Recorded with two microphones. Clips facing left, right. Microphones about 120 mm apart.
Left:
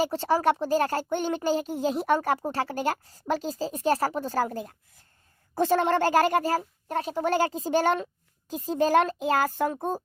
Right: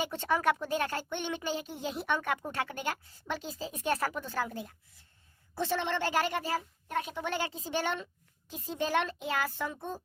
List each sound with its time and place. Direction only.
0.0 s speech: 35° left (ahead or behind)